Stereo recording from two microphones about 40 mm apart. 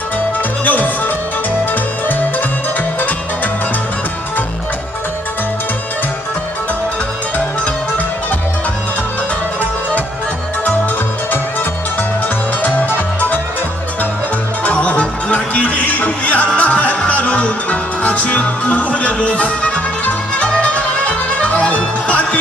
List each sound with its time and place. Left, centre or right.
0.7 s music: left
12.6 s music: left
14.6 s music: left